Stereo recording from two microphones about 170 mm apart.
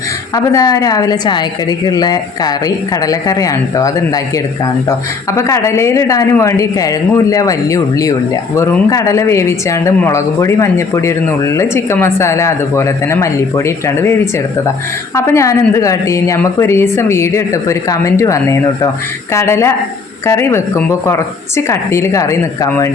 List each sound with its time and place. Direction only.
0.3 s speech: 20° left (ahead or behind)
5.5 s speech: 15° left (ahead or behind)